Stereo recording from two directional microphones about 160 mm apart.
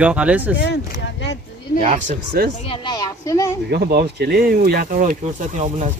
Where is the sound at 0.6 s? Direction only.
90° left.